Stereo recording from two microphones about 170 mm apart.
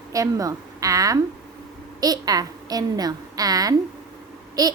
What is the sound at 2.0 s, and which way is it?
A woman's voice, 20° right (ahead or behind).